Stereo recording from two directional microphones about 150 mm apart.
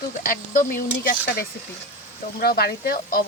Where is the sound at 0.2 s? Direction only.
65° left (ahead or behind).